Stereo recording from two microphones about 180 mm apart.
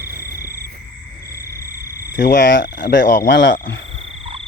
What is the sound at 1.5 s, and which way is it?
Frog, 15° right (ahead or behind).